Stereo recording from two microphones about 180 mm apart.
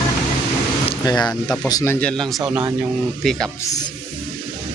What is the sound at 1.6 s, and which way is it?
Speech, 15° left (ahead or behind).